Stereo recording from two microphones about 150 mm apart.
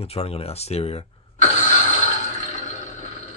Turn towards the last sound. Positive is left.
turn(degrees=55)  # may be behind; listen again after turning